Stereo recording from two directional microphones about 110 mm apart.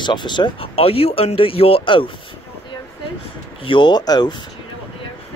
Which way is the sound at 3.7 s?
45° left (ahead or behind).